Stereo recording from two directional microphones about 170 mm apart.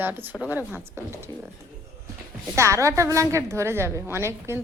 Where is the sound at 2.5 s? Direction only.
15° right (ahead or behind).